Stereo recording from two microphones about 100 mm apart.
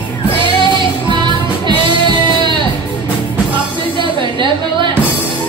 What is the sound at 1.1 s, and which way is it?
Music, 50° right (ahead or behind).